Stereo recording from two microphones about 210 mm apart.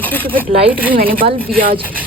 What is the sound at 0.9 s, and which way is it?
Speech, 45° right (ahead or behind).